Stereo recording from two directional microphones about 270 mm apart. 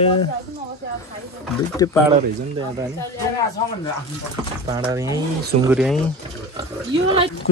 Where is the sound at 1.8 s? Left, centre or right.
Centre.